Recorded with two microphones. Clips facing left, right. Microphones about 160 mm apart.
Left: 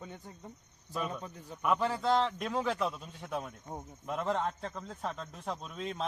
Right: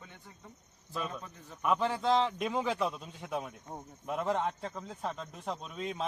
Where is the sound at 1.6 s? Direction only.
Centre (ahead or behind).